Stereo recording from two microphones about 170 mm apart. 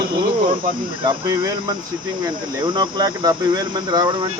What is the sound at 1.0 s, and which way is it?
Speech, 25° right (ahead or behind).